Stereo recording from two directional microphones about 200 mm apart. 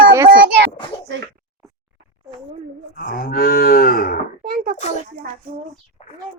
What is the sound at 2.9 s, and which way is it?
Cattle, 45° left (ahead or behind).